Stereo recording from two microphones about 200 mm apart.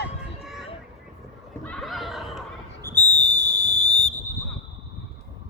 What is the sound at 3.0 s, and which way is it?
Whistle, 35° left (ahead or behind).